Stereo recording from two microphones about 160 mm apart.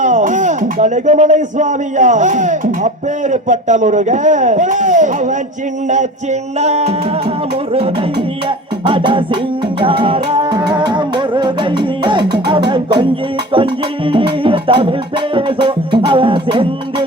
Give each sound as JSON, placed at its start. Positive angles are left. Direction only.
{"t": 0.0, "sound": "speech", "side_deg": -50}
{"t": 6.6, "sound": "music", "side_deg": -40}
{"t": 10.4, "sound": "music", "side_deg": -25}